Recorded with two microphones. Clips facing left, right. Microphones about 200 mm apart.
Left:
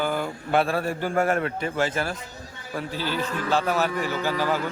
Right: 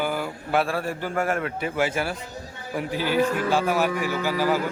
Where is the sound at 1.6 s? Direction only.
10° right (ahead or behind).